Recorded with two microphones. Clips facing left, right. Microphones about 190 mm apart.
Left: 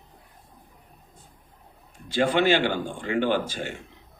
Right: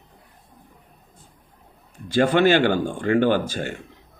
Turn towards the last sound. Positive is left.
turn(degrees=-45)  # may be behind; listen again after turning